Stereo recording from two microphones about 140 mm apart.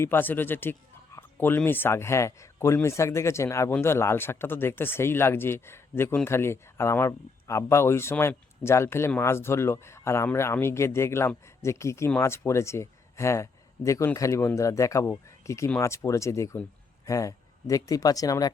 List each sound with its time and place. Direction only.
0.0 s speech: 15° left (ahead or behind)